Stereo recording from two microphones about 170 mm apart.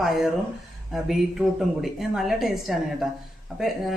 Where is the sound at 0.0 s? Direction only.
Centre (ahead or behind).